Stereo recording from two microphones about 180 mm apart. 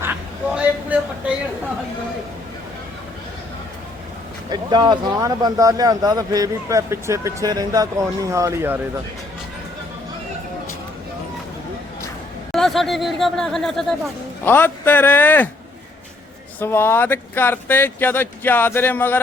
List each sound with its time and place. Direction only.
0.0 s a sound: 10° right (ahead or behind)
4.4 s speech: 25° right (ahead or behind)
12.5 s speech: centre (ahead or behind)
16.6 s speech: 10° left (ahead or behind)